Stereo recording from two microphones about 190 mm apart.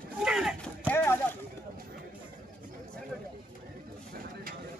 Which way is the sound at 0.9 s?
10° left (ahead or behind).